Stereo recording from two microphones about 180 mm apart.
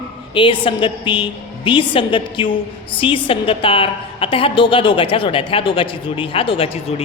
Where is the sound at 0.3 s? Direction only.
30° left (ahead or behind).